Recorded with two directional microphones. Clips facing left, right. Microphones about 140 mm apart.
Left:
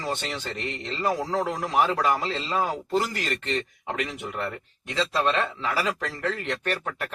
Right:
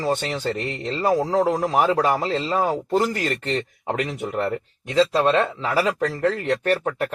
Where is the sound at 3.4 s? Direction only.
35° right (ahead or behind).